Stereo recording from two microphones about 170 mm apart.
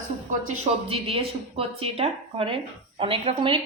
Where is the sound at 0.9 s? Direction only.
35° right (ahead or behind).